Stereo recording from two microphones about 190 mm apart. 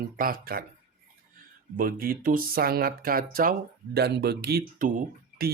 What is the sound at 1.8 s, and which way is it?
Speech, 50° right (ahead or behind).